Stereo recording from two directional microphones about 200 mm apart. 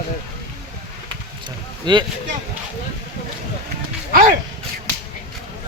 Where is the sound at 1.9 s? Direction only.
20° right (ahead or behind).